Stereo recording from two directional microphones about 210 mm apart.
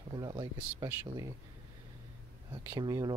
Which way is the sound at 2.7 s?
20° right (ahead or behind).